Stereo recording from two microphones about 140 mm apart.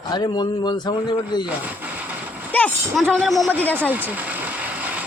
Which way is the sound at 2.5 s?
10° left (ahead or behind).